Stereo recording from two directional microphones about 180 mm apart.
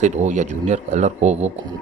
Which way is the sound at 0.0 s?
40° right (ahead or behind).